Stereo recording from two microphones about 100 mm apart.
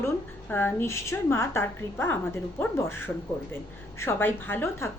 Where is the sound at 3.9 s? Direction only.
25° left (ahead or behind).